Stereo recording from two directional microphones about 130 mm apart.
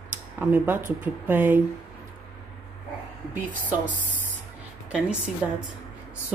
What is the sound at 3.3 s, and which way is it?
Speech, 10° right (ahead or behind).